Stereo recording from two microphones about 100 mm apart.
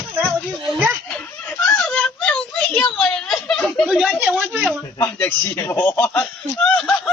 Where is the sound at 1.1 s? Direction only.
10° left (ahead or behind).